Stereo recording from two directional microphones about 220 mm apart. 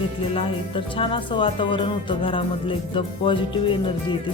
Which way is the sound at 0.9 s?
25° left (ahead or behind).